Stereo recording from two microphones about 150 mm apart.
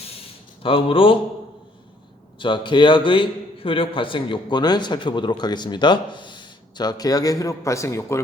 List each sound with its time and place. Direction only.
0.6 s a man's voice: 35° left (ahead or behind)
2.4 s a man's voice: 30° left (ahead or behind)